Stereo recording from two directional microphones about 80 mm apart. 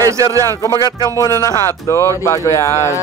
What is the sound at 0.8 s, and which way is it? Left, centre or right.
Speech, left.